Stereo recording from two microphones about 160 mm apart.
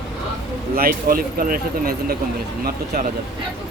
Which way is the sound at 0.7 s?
65° right (ahead or behind).